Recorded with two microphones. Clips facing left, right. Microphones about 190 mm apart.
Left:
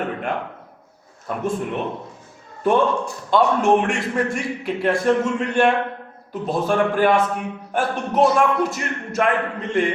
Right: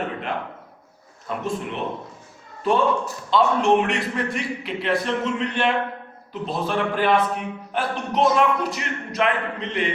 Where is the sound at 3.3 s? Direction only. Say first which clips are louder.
Left 2 dB; 50° left (ahead or behind).